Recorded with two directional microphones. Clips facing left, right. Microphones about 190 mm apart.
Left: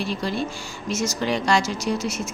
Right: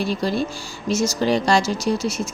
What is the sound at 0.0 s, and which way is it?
Speech, 40° right (ahead or behind).